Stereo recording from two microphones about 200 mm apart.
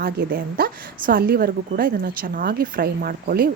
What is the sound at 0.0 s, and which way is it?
A woman's voice, 50° right (ahead or behind).